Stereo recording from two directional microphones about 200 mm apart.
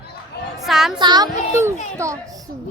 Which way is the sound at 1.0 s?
20° right (ahead or behind).